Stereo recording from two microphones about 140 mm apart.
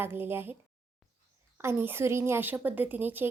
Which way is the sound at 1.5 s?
15° right (ahead or behind).